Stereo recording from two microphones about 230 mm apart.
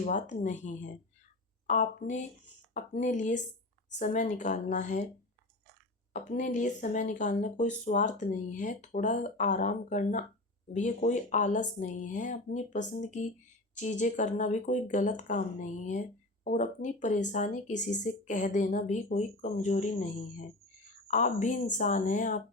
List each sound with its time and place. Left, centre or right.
0.0 s speech: left
6.1 s speech: left